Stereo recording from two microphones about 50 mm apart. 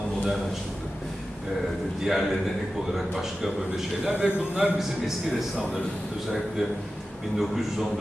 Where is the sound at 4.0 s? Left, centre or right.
Right.